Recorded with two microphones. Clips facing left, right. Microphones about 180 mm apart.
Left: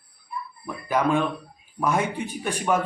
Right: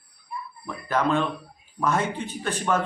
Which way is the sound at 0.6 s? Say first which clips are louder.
Left 1 dB; 10° left (ahead or behind).